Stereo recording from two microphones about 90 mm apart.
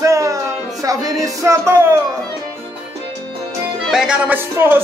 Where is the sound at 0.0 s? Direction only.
35° right (ahead or behind).